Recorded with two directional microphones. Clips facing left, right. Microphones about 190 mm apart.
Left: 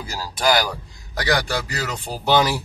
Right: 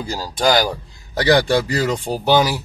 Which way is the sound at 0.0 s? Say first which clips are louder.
Right 4 dB; 30° right (ahead or behind).